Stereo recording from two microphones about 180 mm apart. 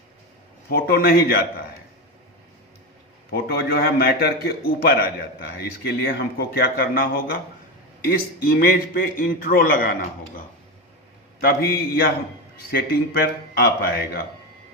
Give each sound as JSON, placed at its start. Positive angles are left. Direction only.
{"t": 0.7, "sound": "a man's voice", "side_deg": 55}
{"t": 3.3, "sound": "a man's voice", "side_deg": 60}